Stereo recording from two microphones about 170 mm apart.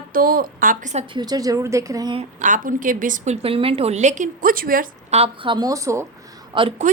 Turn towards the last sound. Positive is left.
turn(degrees=-30)  # may be behind; listen again after turning